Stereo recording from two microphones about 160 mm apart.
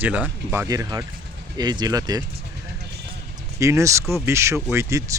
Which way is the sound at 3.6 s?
20° right (ahead or behind).